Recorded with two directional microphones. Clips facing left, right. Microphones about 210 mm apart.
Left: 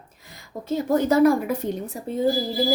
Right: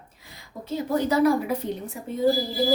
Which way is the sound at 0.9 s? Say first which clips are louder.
Left 3 dB; 50° left (ahead or behind).